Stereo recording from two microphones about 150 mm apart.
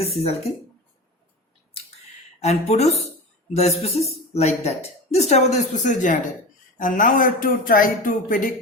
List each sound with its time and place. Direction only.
0.2 s speech: 40° left (ahead or behind)
2.4 s a man's voice: 45° left (ahead or behind); by 8.5 s 65° left (ahead or behind)